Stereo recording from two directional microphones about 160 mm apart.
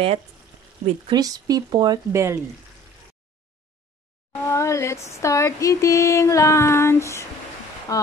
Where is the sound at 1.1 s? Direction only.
25° right (ahead or behind).